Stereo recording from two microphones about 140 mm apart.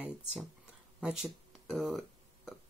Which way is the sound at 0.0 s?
5° right (ahead or behind).